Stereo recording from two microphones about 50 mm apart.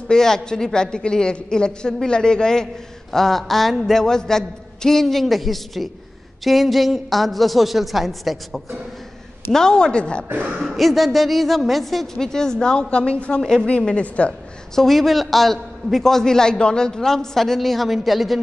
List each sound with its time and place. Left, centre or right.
0.1 s a woman's voice: centre
9.5 s a woman's voice: centre
10.6 s a man's voice: centre; by 13.4 s left
13.4 s a woman's voice: centre
13.7 s a woman's voice: left
14.8 s a man's voice: centre